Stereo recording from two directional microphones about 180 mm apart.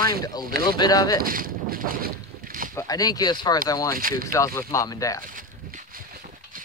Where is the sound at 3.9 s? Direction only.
50° right (ahead or behind).